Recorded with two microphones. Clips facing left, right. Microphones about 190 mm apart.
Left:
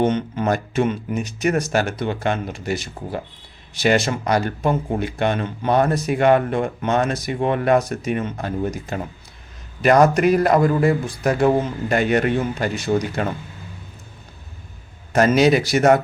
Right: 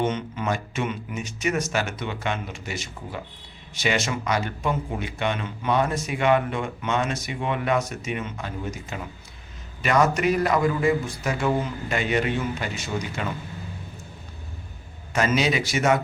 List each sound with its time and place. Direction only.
0.2 s a man's voice: 40° left (ahead or behind)
11.3 s a man's voice: 40° left (ahead or behind)
12.4 s speech: 40° left (ahead or behind)
15.1 s speech: 40° left (ahead or behind)